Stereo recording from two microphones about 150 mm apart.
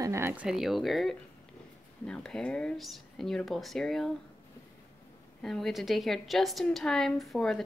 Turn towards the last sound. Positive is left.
turn(degrees=0)  # may be behind; listen again after turning